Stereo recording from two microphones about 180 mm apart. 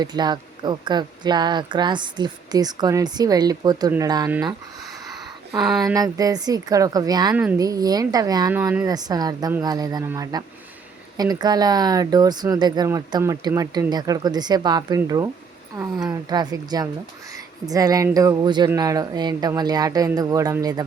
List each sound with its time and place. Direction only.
0.0 s speech: 25° right (ahead or behind)
5.5 s speech: centre (ahead or behind)
5.8 s speech: 20° right (ahead or behind)